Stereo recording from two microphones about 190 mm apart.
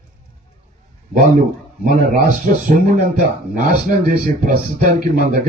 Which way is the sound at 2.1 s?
45° right (ahead or behind).